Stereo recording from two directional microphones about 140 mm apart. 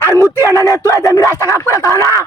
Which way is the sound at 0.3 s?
20° right (ahead or behind).